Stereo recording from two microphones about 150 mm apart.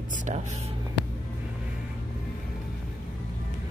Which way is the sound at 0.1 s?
55° right (ahead or behind).